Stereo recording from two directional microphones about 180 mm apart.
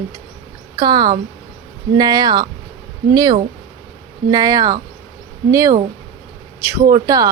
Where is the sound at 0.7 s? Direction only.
20° right (ahead or behind).